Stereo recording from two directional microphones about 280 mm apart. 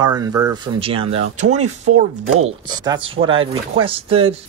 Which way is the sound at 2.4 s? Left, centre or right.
Centre.